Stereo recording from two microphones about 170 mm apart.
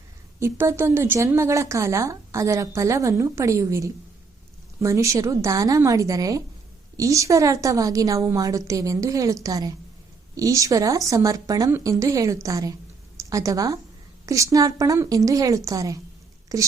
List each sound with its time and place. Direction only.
0.3 s a woman's voice: 15° right (ahead or behind)